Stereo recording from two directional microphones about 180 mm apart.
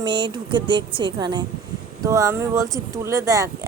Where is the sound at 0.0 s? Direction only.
25° right (ahead or behind).